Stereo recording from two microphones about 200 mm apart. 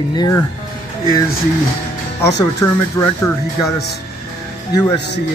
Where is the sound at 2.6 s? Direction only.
15° left (ahead or behind).